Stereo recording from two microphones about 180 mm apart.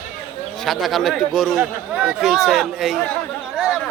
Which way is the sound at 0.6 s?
Centre (ahead or behind).